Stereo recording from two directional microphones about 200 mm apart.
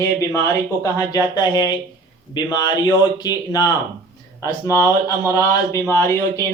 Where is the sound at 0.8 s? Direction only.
20° left (ahead or behind).